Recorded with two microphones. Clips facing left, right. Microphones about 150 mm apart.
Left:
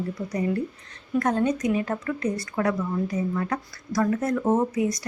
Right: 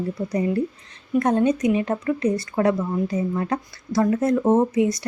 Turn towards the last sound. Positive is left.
turn(degrees=-25)  # may be behind; listen again after turning